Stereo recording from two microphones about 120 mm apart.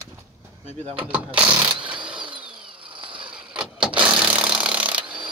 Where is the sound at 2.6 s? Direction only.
45° right (ahead or behind).